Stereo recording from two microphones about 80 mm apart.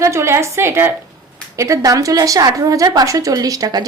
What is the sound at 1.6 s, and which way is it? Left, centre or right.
A woman's voice, right.